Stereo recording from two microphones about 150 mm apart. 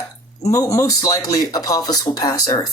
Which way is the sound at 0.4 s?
25° left (ahead or behind).